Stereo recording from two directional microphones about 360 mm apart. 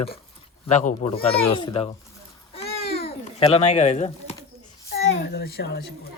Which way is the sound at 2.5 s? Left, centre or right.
Centre.